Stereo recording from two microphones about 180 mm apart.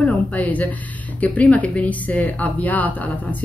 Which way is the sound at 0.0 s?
10° left (ahead or behind).